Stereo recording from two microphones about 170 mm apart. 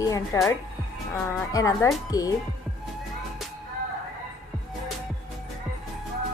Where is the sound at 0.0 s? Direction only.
20° left (ahead or behind).